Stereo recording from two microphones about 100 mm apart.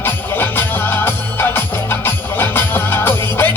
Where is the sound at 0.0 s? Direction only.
20° left (ahead or behind).